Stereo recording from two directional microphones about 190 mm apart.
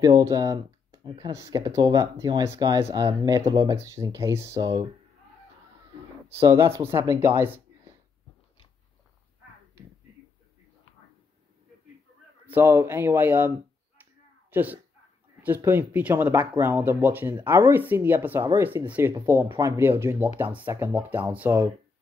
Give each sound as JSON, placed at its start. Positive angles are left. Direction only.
{"t": 0.0, "sound": "speech", "side_deg": -20}
{"t": 6.2, "sound": "speech", "side_deg": -15}
{"t": 12.4, "sound": "speech", "side_deg": -10}
{"t": 14.5, "sound": "speech", "side_deg": -10}